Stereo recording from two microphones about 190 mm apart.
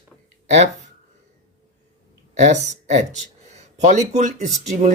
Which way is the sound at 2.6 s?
40° right (ahead or behind).